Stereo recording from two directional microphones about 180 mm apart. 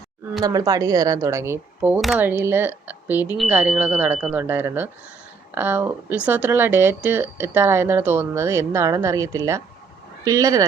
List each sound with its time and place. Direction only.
0.4 s speech: 20° right (ahead or behind)